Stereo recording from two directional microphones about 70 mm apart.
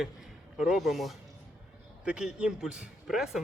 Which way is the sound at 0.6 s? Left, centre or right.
Centre.